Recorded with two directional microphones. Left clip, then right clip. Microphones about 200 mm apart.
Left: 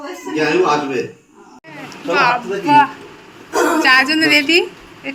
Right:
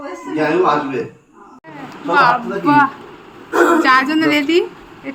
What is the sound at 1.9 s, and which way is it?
A woman's voice, 5° right (ahead or behind).